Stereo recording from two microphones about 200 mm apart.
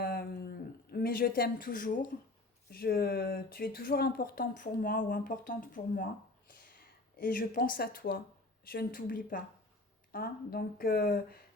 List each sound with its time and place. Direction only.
0.0 s a sound: 50° left (ahead or behind)
2.6 s speech: 50° left (ahead or behind)
7.2 s speech: 45° left (ahead or behind)